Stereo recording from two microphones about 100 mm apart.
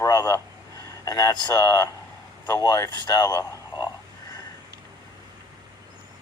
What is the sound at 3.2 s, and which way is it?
Speech, 35° left (ahead or behind).